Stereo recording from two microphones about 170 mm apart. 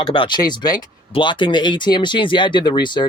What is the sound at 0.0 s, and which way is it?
Speech, 30° left (ahead or behind).